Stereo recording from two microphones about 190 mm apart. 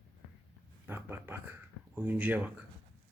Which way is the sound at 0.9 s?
10° right (ahead or behind).